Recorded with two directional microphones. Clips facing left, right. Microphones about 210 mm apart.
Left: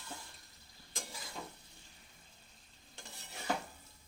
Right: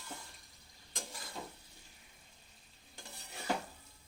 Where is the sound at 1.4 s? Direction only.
15° right (ahead or behind).